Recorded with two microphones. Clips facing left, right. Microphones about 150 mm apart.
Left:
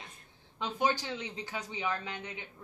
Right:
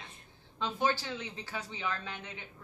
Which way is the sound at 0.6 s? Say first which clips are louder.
Even; 15° left (ahead or behind).